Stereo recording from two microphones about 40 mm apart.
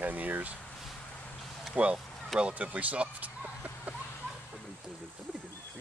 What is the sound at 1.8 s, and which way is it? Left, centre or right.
Speech, right.